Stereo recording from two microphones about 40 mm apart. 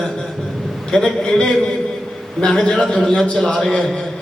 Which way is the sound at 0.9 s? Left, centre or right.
Centre.